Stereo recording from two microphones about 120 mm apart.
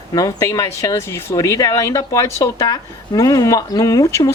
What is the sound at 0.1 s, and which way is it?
Speech, 30° left (ahead or behind).